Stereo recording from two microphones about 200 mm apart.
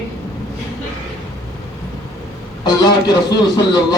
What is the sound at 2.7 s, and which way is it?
A man's voice, 20° left (ahead or behind).